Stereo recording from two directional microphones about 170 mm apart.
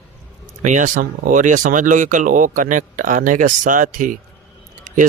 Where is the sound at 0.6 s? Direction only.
45° right (ahead or behind).